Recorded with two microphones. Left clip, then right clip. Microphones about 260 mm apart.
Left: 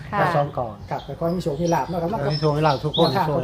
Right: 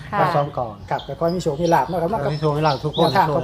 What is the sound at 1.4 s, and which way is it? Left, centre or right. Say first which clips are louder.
Speech: right 5 dB; right.